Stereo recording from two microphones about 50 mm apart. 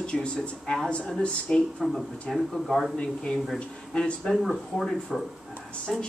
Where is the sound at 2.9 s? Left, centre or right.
Left.